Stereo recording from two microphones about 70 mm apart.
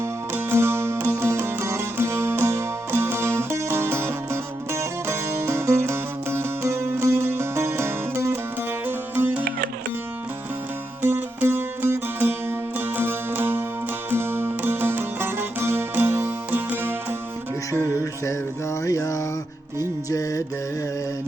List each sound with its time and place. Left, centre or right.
0.0 s music: right
8.9 s music: right
11.4 s music: right
18.0 s music: left